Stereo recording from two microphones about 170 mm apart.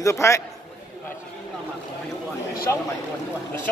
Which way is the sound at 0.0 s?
15° left (ahead or behind).